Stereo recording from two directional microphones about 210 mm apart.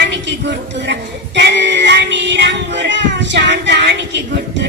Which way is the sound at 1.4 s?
55° right (ahead or behind).